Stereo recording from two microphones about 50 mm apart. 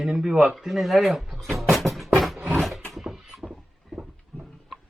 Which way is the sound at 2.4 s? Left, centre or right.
Right.